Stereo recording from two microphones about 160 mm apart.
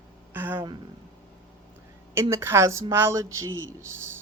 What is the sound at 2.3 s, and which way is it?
A woman's voice, 15° right (ahead or behind).